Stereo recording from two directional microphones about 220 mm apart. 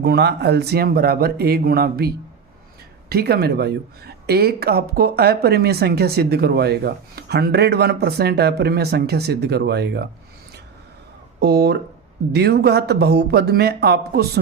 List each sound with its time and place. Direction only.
0.0 s speech: 50° right (ahead or behind)
11.3 s speech: 50° right (ahead or behind)